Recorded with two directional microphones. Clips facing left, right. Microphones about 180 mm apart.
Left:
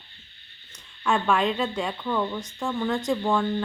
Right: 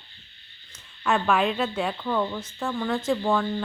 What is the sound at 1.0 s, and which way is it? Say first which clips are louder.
Speech: even; 5° right (ahead or behind).